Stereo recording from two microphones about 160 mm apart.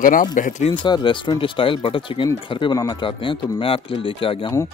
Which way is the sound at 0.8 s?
30° left (ahead or behind).